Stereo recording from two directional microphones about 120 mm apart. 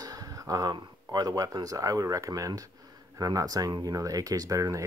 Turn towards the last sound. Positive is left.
turn(degrees=-25)  # may be behind; listen again after turning